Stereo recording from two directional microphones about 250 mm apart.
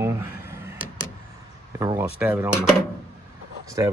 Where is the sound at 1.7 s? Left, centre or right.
Centre.